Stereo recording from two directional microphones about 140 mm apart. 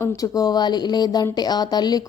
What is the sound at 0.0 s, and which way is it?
Speech, 25° left (ahead or behind).